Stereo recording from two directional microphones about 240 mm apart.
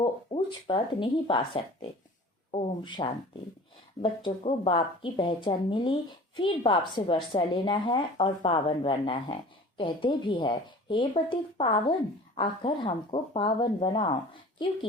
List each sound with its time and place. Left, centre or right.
0.0 s speech: left